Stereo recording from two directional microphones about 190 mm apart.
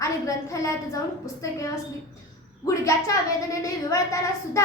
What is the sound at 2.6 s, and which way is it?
A woman's voice, 15° left (ahead or behind).